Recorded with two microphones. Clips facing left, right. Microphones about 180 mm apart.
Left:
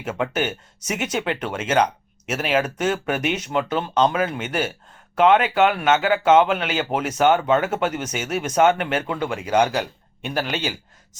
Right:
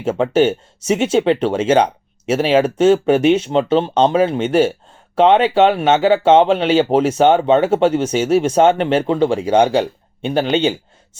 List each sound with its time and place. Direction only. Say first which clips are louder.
0.0 s speech: right 10 dB; 30° right (ahead or behind)